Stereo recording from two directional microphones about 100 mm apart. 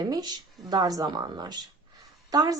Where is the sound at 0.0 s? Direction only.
45° right (ahead or behind).